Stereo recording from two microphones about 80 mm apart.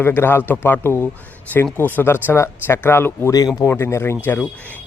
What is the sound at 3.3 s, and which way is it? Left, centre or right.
Speech, left.